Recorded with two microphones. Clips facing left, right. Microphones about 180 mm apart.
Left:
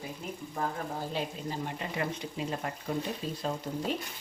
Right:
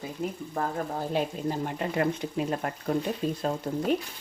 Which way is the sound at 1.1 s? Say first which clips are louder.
Right 6 dB; 50° right (ahead or behind).